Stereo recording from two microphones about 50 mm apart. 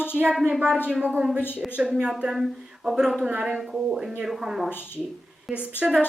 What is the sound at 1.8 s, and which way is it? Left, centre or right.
Speech, centre.